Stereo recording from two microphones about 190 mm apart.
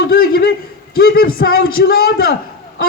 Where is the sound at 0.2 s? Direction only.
55° left (ahead or behind).